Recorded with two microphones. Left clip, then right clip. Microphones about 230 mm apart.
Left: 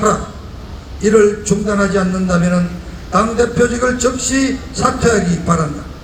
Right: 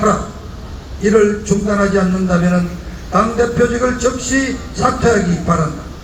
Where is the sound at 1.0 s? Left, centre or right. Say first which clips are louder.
Left 1 dB; left.